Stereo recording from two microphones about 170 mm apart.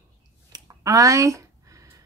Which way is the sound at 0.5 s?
20° right (ahead or behind).